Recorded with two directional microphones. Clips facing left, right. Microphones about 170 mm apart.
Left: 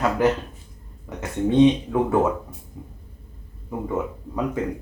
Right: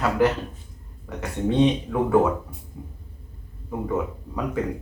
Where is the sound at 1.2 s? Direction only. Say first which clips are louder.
Left 4 dB; 15° left (ahead or behind).